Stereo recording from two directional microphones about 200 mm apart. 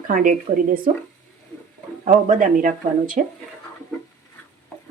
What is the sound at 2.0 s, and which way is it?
Speech, 40° right (ahead or behind).